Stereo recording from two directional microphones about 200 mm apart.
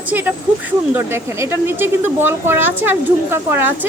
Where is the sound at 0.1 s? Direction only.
10° right (ahead or behind).